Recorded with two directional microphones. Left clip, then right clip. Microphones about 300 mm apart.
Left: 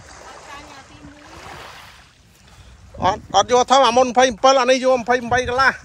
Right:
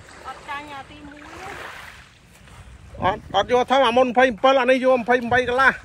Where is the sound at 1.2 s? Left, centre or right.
Left.